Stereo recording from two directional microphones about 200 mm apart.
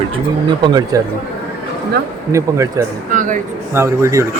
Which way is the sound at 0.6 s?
20° right (ahead or behind).